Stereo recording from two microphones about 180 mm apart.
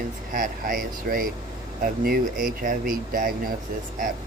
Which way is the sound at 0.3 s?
50° right (ahead or behind).